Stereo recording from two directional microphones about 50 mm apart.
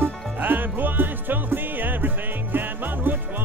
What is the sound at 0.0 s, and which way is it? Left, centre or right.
Music, right.